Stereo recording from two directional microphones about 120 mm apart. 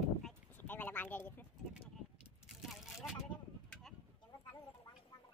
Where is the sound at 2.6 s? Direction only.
Centre (ahead or behind).